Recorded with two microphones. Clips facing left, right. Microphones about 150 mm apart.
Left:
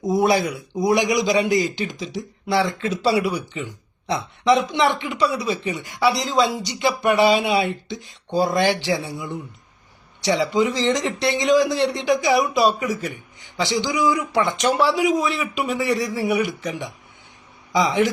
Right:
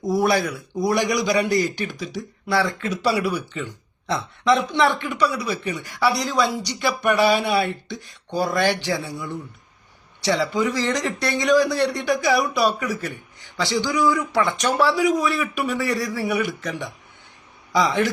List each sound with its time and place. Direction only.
0.1 s a man's voice: 20° left (ahead or behind)
10.2 s a man's voice: 20° left (ahead or behind)